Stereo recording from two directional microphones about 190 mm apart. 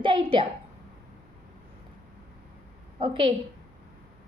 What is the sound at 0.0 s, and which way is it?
Speech, 25° right (ahead or behind).